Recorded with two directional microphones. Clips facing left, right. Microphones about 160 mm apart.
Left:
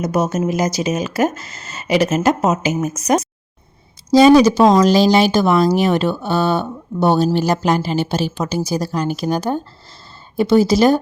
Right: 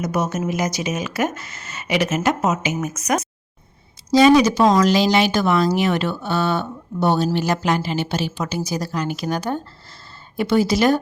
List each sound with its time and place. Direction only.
0.0 s speech: 35° left (ahead or behind)